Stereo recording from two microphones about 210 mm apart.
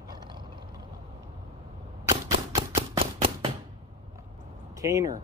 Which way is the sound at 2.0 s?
15° right (ahead or behind).